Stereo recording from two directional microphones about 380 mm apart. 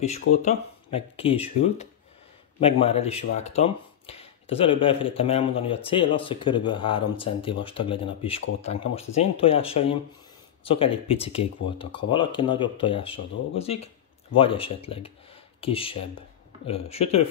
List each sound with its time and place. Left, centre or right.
0.4 s speech: centre